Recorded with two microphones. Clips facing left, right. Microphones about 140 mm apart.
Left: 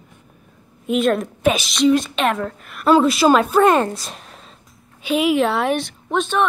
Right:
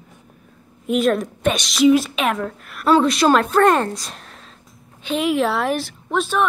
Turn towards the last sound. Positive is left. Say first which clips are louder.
# left 1 dB
turn(degrees=-5)  # may be behind; listen again after turning